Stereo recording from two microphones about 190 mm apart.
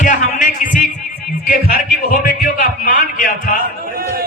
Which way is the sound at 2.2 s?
45° left (ahead or behind).